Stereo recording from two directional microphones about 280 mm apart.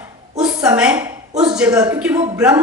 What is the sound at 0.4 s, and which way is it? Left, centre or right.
A woman's voice, centre.